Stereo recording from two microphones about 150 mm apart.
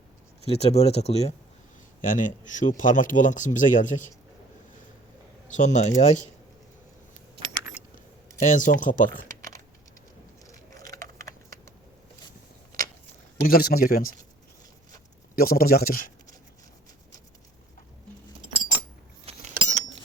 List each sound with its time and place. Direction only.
0.4 s speech: 40° left (ahead or behind)
2.0 s speech: 60° left (ahead or behind)
5.5 s speech: 55° left (ahead or behind)
7.9 s speech: 60° left (ahead or behind)
9.2 s typing: 20° left (ahead or behind)
10.8 s a sound: 20° left (ahead or behind)
11.2 s typing: 20° left (ahead or behind)
12.7 s a sound: 65° right (ahead or behind)
13.5 s speech: 85° left
15.4 s speech: 80° left
18.5 s keys jangling: 35° right (ahead or behind)